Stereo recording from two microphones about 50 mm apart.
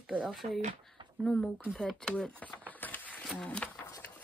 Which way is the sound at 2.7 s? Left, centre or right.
Left.